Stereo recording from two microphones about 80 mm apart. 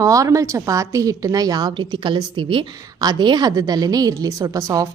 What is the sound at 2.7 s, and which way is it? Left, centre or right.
A woman's voice, right.